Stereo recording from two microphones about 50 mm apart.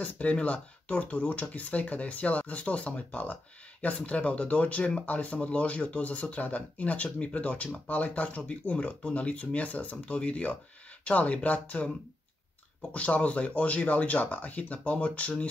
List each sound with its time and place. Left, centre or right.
0.0 s speech: left
12.9 s speech: left